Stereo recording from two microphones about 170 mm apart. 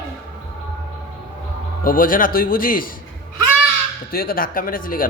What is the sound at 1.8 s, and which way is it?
Speech, 55° left (ahead or behind).